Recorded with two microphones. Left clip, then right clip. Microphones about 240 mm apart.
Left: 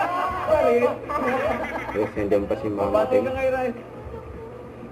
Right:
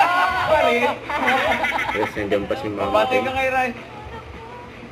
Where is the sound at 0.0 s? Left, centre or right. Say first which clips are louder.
Right 7 dB; centre.